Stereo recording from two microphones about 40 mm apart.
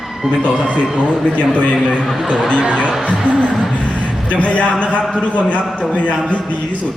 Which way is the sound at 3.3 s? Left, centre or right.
Left.